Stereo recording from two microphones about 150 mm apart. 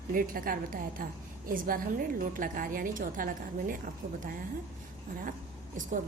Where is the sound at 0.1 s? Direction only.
70° right (ahead or behind).